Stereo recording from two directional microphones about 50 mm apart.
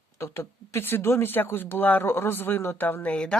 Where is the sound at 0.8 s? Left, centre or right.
Left.